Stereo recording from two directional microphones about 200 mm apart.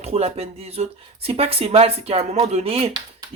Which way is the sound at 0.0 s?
30° right (ahead or behind).